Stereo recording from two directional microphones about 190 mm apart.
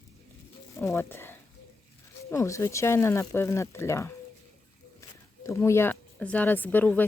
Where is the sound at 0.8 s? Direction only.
10° left (ahead or behind).